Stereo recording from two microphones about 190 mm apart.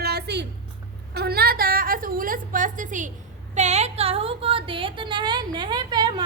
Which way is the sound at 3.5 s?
35° right (ahead or behind).